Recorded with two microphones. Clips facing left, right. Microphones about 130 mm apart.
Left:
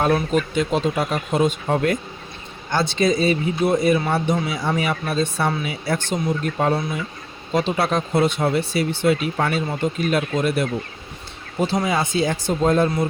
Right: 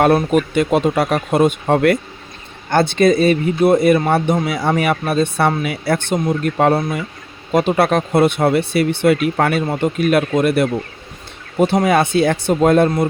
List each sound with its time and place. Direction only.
0.0 s speech: 60° right (ahead or behind)
2.6 s speech: 55° right (ahead or behind)